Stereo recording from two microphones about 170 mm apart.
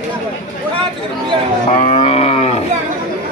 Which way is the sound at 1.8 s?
35° left (ahead or behind).